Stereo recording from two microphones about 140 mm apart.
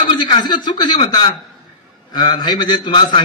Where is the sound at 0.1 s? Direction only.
35° left (ahead or behind).